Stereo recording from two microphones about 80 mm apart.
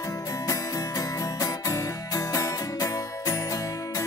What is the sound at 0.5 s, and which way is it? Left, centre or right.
Music, left.